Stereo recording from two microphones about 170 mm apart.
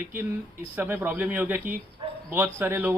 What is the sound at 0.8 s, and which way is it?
A man's voice, 10° right (ahead or behind).